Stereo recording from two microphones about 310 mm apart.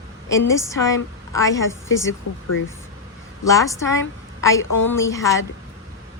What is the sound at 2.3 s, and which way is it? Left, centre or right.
Speech, left.